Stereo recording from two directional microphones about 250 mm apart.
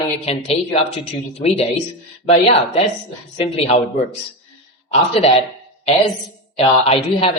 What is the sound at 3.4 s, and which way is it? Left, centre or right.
Speech, left.